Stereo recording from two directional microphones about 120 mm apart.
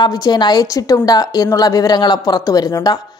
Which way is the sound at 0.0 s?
35° left (ahead or behind).